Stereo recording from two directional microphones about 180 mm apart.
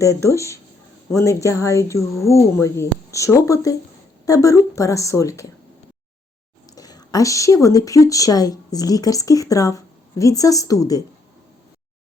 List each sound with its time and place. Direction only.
0.0 s speech: 15° left (ahead or behind)
6.7 s speech: 20° left (ahead or behind)